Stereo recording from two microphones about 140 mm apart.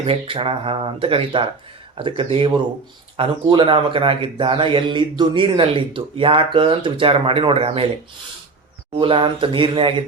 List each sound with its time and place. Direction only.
0.0 s speech: 40° right (ahead or behind)
9.0 s speech: 40° right (ahead or behind)